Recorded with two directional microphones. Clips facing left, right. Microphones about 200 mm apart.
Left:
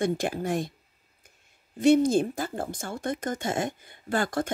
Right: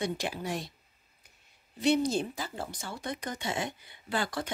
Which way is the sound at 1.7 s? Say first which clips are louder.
Left 7 dB; 50° left (ahead or behind).